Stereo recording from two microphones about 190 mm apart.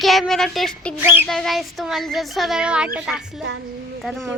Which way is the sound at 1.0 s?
10° right (ahead or behind).